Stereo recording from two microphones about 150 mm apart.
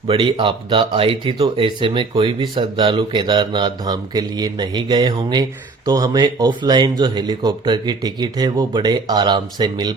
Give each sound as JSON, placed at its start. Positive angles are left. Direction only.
{"t": 0.1, "sound": "speech", "side_deg": -35}